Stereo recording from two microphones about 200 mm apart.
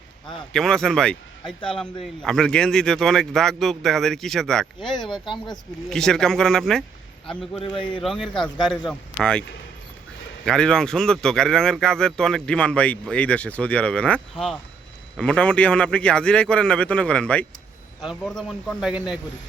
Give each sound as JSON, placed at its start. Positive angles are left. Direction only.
{"t": 0.5, "sound": "speech", "side_deg": 5}
{"t": 7.6, "sound": "speech", "side_deg": 25}
{"t": 8.0, "sound": "speech", "side_deg": 0}
{"t": 10.4, "sound": "speech", "side_deg": 5}